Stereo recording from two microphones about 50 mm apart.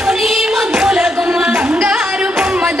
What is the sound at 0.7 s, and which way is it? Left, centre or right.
Music, centre.